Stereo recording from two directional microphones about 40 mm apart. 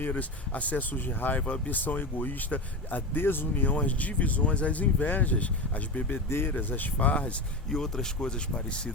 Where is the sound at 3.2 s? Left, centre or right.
Left.